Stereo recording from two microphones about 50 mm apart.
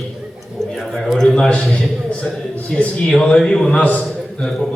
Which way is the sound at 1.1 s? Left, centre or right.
Centre.